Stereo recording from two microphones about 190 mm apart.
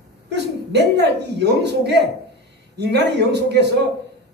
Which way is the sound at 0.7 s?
65° right (ahead or behind).